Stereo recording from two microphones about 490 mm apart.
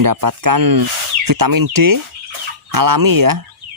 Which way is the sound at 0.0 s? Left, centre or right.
Right.